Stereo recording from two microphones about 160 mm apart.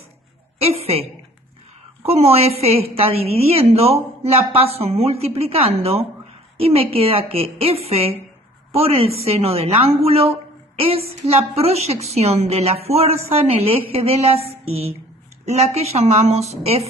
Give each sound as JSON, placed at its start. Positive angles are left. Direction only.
{"t": 0.6, "sound": "a woman's voice", "side_deg": -40}
{"t": 2.0, "sound": "a woman's voice", "side_deg": -40}
{"t": 14.5, "sound": "a sound", "side_deg": -40}
{"t": 15.4, "sound": "a woman's voice", "side_deg": -40}